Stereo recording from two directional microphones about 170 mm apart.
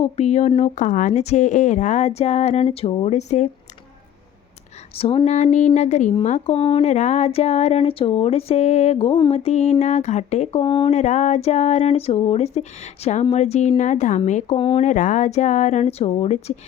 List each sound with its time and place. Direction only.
0.0 s speech: 40° left (ahead or behind)
4.9 s speech: 35° left (ahead or behind)
6.8 s speech: 40° left (ahead or behind)
10.6 s speech: 30° left (ahead or behind)
10.9 s speech: 45° left (ahead or behind)
14.5 s speech: 30° left (ahead or behind)
14.8 s speech: 50° left (ahead or behind)